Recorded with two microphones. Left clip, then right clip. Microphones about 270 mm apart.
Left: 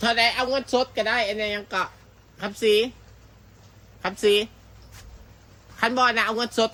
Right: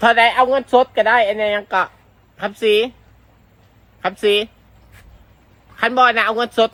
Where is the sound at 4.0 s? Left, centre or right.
Centre.